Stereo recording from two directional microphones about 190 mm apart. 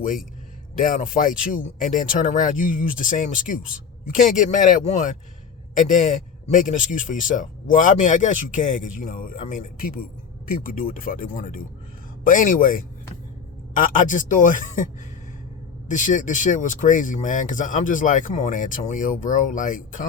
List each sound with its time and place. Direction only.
0.8 s speech: 45° left (ahead or behind)
15.9 s speech: 40° left (ahead or behind)